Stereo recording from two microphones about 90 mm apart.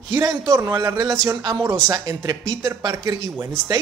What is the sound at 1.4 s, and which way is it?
A man's voice, 50° right (ahead or behind).